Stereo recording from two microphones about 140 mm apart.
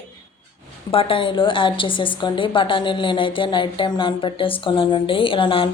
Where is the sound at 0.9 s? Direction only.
40° left (ahead or behind).